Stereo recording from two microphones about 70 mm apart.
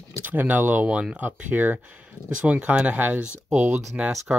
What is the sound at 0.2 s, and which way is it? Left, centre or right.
Speech, right.